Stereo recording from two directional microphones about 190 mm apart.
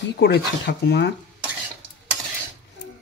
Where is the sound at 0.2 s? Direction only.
60° left (ahead or behind).